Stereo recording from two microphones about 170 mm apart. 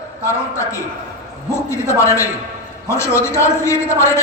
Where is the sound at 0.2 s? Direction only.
15° left (ahead or behind).